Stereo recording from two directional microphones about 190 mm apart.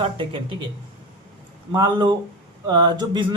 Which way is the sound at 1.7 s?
25° right (ahead or behind).